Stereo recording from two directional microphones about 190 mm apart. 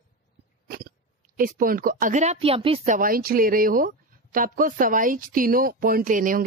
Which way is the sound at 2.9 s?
50° right (ahead or behind).